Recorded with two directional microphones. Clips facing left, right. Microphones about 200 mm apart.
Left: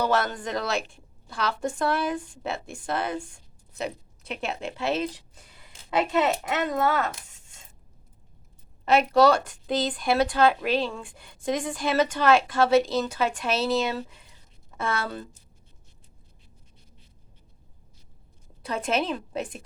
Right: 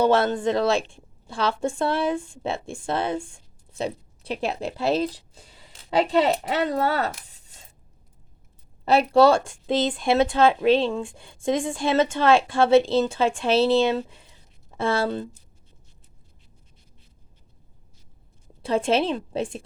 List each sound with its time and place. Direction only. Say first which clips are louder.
0.0 s a woman's voice: right 6 dB; 25° right (ahead or behind)
8.8 s speech: right 2 dB; 35° right (ahead or behind)
18.6 s speech: right 5 dB; 30° right (ahead or behind)